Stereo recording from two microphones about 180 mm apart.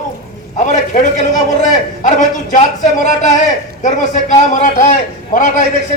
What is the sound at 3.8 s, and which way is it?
A man's voice, 45° left (ahead or behind).